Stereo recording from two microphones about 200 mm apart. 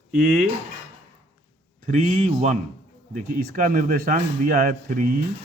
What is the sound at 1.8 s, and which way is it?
Speech, 35° right (ahead or behind).